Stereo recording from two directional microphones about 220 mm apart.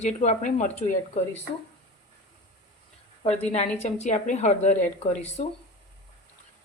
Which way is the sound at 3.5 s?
30° left (ahead or behind).